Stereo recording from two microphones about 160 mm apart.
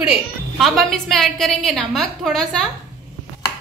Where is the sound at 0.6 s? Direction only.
Centre (ahead or behind).